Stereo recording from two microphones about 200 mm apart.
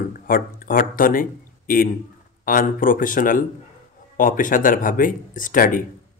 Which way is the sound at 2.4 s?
45° left (ahead or behind).